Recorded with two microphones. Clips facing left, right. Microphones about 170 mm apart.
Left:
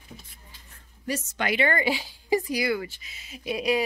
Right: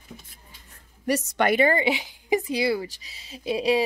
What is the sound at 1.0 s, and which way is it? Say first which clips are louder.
Speech: right 6 dB; 65° right (ahead or behind).